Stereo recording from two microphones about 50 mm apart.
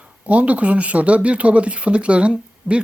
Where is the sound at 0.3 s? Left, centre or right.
Right.